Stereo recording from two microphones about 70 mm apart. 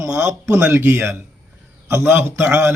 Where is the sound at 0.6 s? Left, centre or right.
Right.